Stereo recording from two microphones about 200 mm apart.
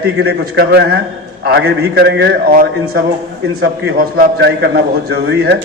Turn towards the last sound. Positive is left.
turn(degrees=-55)  # may be behind; listen again after turning